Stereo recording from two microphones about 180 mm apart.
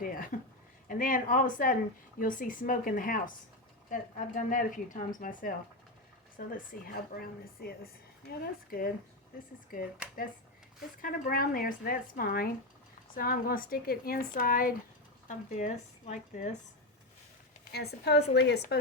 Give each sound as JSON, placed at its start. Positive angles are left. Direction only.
{"t": 0.0, "sound": "a sound", "side_deg": 50}
{"t": 0.9, "sound": "a woman's voice", "side_deg": 50}
{"t": 4.4, "sound": "a woman's voice", "side_deg": 45}
{"t": 11.0, "sound": "a woman's voice", "side_deg": 55}
{"t": 17.7, "sound": "a woman's voice", "side_deg": 65}